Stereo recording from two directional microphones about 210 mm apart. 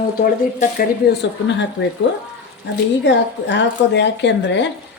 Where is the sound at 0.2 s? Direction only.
45° left (ahead or behind).